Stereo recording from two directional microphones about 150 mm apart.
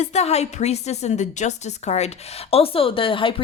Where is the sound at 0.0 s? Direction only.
45° left (ahead or behind).